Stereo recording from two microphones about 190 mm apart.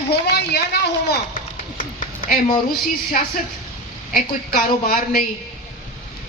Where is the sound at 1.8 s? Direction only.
45° left (ahead or behind).